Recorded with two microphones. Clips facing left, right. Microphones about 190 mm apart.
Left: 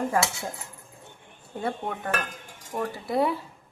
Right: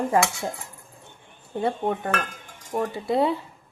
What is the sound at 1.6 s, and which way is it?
Speech, 25° right (ahead or behind).